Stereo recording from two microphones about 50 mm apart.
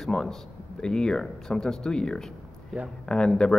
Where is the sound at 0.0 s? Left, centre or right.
Centre.